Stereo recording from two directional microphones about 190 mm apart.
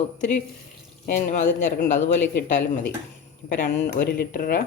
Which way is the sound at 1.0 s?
40° left (ahead or behind).